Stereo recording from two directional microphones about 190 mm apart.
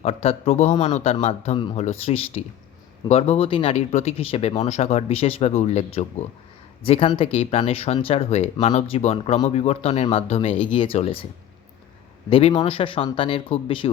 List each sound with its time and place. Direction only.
0.0 s speech: 30° left (ahead or behind)
12.3 s speech: 30° left (ahead or behind)